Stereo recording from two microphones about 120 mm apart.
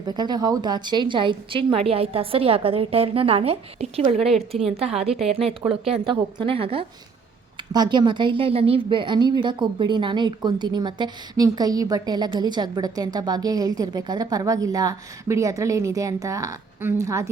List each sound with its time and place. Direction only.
0.0 s a woman's voice: 35° right (ahead or behind); by 4.3 s 60° right (ahead or behind)
4.3 s a woman's voice: centre (ahead or behind)
5.6 s a woman's voice: 35° right (ahead or behind)
6.1 s a woman's voice: 45° right (ahead or behind)
7.7 s a woman's voice: 40° right (ahead or behind)